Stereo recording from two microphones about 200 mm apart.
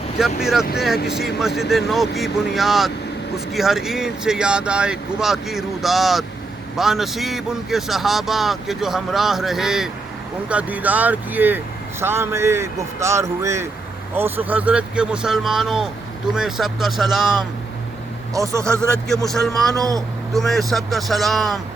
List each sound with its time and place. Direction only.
0.2 s speech: centre (ahead or behind)
18.3 s speech: 15° right (ahead or behind)
19.2 s speech: centre (ahead or behind)
19.7 s speech: 20° right (ahead or behind)
20.3 s speech: centre (ahead or behind)